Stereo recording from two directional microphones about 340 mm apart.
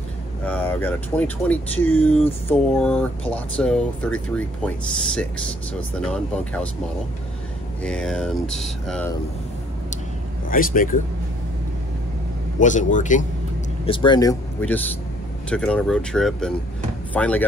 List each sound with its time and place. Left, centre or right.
0.5 s speech: centre
7.8 s speech: centre
10.5 s a man's voice: left
12.5 s a man's voice: left; by 17.5 s centre